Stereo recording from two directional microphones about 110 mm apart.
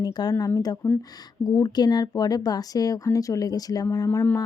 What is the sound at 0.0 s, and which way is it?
Speech, 40° left (ahead or behind).